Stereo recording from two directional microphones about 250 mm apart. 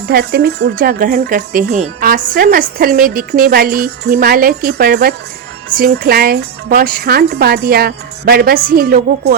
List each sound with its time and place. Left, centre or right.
0.1 s speech: right